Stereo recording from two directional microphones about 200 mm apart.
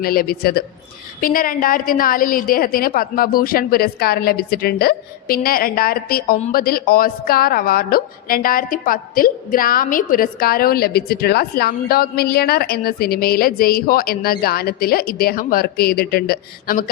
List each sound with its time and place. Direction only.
0.0 s a woman's voice: 50° left (ahead or behind)